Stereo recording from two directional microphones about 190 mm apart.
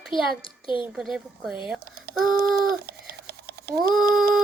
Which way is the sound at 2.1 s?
Centre (ahead or behind).